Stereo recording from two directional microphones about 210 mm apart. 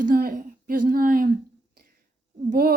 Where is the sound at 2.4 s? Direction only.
45° right (ahead or behind).